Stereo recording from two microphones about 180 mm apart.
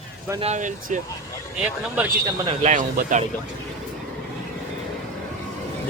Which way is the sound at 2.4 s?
40° right (ahead or behind).